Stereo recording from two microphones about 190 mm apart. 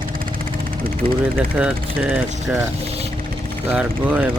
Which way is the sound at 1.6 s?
5° right (ahead or behind).